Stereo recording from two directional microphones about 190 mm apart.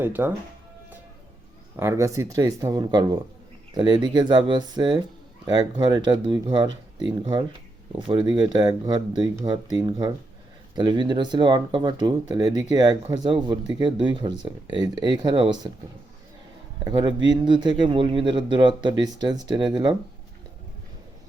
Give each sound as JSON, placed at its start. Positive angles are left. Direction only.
{"t": 0.0, "sound": "speech", "side_deg": -10}
{"t": 1.7, "sound": "speech", "side_deg": -15}
{"t": 16.8, "sound": "speech", "side_deg": -25}